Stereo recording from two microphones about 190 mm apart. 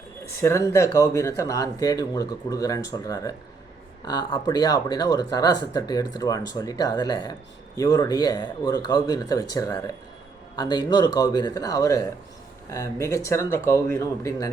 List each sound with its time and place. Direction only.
0.4 s speech: 15° left (ahead or behind)